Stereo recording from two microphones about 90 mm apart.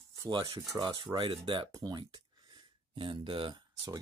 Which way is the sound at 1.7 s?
50° right (ahead or behind).